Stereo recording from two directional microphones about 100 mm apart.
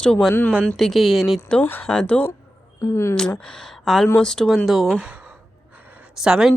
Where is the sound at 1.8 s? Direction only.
10° left (ahead or behind).